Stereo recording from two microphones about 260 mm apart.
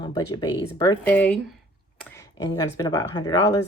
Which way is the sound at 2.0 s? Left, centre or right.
Centre.